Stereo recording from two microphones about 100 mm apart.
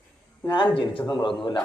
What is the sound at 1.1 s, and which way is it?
Speech, 45° left (ahead or behind).